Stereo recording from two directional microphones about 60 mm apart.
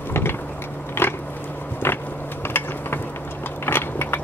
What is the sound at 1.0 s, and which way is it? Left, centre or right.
Biting, left.